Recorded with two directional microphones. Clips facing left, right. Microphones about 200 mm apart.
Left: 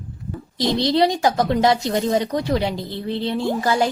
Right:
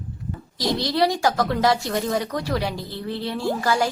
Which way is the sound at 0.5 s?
25° left (ahead or behind).